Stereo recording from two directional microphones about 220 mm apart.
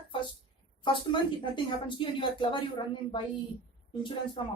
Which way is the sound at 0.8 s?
20° left (ahead or behind).